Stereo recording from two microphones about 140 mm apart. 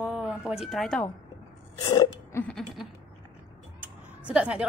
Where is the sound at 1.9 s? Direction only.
25° left (ahead or behind).